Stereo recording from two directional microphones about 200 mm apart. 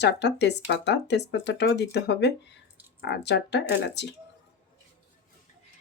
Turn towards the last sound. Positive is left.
turn(degrees=60)  # may be behind; listen again after turning